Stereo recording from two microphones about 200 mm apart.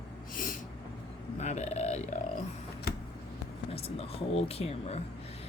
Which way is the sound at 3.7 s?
30° left (ahead or behind).